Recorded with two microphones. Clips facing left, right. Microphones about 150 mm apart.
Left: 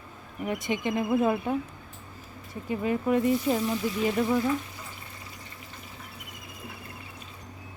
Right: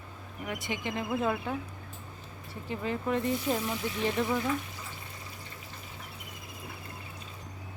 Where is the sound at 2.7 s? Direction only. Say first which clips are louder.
Left 5 dB; 15° left (ahead or behind).